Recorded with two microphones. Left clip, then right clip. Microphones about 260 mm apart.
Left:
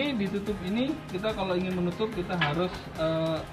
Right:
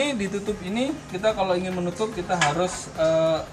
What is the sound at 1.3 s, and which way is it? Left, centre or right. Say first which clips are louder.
Speech: right 6 dB; right.